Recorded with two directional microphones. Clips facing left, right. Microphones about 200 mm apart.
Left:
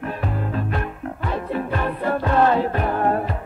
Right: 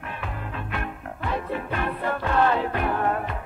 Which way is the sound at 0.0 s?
40° left (ahead or behind).